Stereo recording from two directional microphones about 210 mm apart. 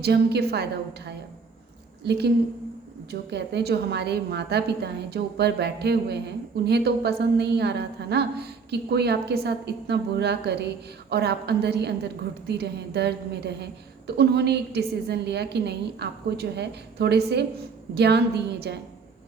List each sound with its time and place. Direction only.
0.0 s a woman's voice: 50° right (ahead or behind)